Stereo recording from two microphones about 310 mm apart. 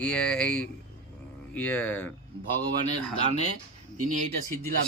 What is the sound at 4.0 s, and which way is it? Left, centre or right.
Speech, right.